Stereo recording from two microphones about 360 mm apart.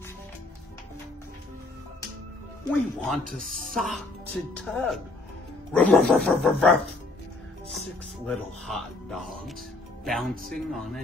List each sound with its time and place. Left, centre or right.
2.7 s speech: centre
3.3 s speech: right
3.7 s speech: centre
8.3 s speech: centre